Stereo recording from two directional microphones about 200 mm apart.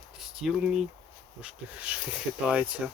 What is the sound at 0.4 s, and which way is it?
Speech, centre (ahead or behind).